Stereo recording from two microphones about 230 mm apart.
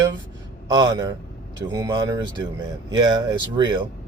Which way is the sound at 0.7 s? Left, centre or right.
Centre.